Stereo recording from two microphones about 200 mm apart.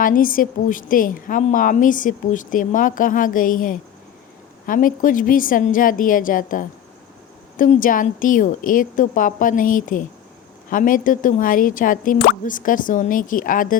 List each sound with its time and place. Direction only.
0.0 s a woman's voice: 45° left (ahead or behind)